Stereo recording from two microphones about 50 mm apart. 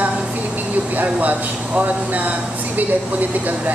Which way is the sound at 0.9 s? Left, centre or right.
Right.